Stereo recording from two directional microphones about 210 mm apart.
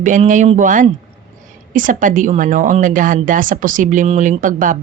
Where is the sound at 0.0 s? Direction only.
35° right (ahead or behind).